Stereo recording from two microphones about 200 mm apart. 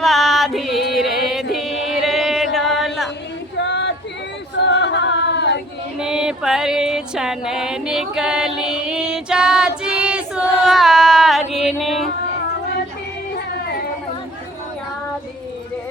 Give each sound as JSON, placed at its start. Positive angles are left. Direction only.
{"t": 0.0, "sound": "music", "side_deg": 0}
{"t": 3.7, "sound": "a sound", "side_deg": 65}
{"t": 4.6, "sound": "singing", "side_deg": 60}
{"t": 6.0, "sound": "music", "side_deg": -5}